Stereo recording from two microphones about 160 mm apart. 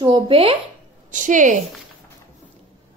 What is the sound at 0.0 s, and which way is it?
Speech, 35° right (ahead or behind).